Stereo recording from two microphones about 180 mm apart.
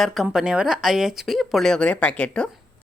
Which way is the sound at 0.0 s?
Centre (ahead or behind).